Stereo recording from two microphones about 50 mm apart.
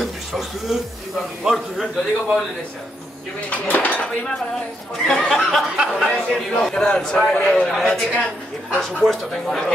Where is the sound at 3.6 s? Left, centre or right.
Left.